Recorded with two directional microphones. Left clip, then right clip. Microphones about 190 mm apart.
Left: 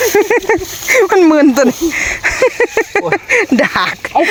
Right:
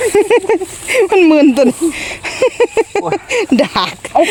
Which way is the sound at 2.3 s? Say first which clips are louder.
Right 2 dB; 10° right (ahead or behind).